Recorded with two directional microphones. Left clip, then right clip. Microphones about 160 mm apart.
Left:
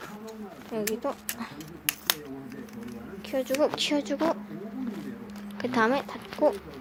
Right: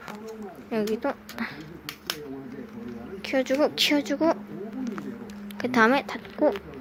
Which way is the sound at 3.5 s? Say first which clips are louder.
Right 2 dB; 15° right (ahead or behind).